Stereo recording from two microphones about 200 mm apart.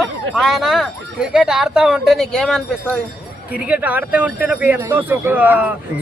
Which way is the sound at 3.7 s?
10° right (ahead or behind).